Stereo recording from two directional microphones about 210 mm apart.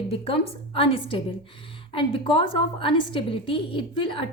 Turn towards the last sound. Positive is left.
turn(degrees=25)  # may be behind; listen again after turning